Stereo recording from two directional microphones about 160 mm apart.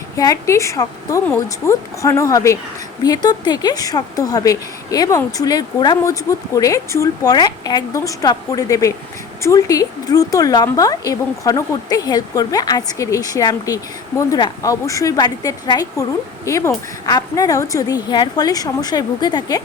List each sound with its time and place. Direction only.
0.2 s a woman's voice: 20° left (ahead or behind)